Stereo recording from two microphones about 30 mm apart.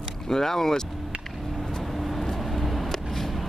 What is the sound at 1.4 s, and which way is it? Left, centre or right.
Vehicle, centre.